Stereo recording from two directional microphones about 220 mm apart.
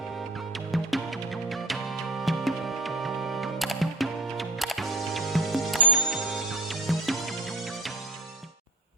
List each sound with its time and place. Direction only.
0.7 s music: centre (ahead or behind)